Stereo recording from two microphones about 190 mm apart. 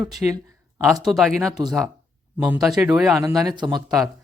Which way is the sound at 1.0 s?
Centre (ahead or behind).